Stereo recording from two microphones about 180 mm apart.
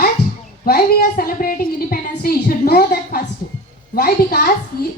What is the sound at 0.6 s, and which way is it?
A woman's voice, 55° left (ahead or behind).